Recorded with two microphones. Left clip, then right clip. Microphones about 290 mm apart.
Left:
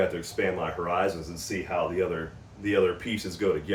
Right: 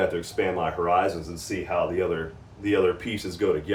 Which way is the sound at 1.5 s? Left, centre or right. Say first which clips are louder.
Right 2 dB; centre.